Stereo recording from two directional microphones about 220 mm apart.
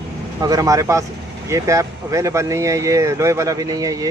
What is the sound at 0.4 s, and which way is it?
Speech, 15° right (ahead or behind).